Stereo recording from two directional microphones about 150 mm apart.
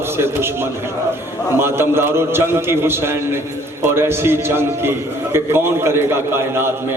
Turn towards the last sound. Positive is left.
turn(degrees=-15)  # may be behind; listen again after turning